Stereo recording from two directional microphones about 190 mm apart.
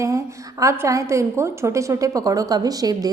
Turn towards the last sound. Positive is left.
turn(degrees=-20)  # may be behind; listen again after turning